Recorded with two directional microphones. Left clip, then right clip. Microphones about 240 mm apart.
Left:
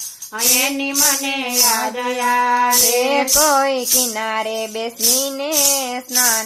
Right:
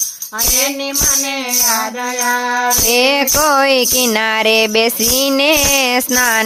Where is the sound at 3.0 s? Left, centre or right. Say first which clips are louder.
Right 3 dB; right.